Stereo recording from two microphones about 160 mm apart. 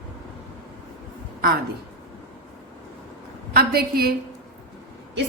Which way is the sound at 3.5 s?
75° right (ahead or behind).